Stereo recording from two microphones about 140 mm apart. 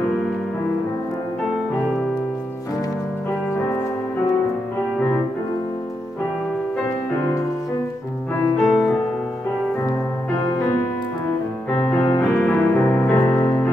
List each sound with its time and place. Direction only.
8.4 s piano: centre (ahead or behind)
11.7 s music: 15° left (ahead or behind)
12.4 s piano: 10° left (ahead or behind)
13.1 s music: 15° left (ahead or behind)